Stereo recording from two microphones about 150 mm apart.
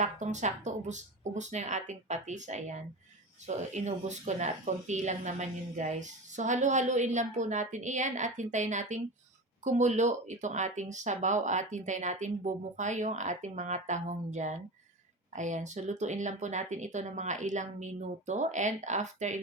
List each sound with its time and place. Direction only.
0.0 s speech: 50° right (ahead or behind)